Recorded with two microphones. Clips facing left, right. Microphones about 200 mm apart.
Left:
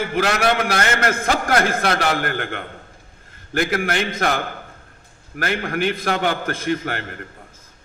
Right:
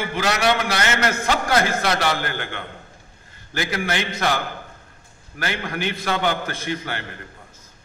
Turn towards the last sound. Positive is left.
turn(degrees=50)  # may be behind; listen again after turning